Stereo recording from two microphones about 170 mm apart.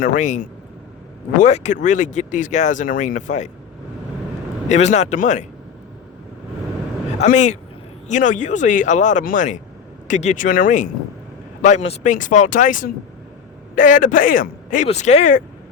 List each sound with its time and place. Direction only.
0.0 s speech: 50° left (ahead or behind)
4.7 s speech: 40° left (ahead or behind)
7.2 s speech: 45° left (ahead or behind)
14.8 s speech: 40° left (ahead or behind)